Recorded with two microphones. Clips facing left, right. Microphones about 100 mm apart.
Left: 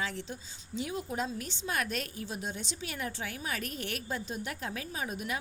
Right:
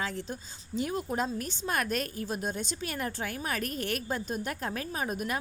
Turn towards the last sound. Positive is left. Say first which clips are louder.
# right 4 dB
turn(degrees=-50)  # may be behind; listen again after turning